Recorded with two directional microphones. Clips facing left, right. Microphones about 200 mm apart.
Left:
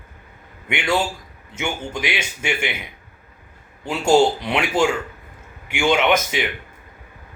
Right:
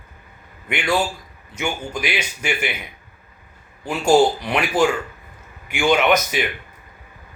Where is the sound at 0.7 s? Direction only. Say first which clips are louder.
Even; 25° left (ahead or behind).